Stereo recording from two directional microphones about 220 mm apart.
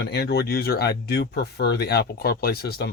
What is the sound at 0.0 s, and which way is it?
Speech, 50° left (ahead or behind).